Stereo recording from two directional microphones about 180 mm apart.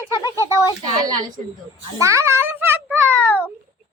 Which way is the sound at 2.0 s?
15° right (ahead or behind).